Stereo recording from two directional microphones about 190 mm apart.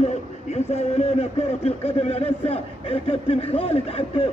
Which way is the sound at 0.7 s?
35° left (ahead or behind).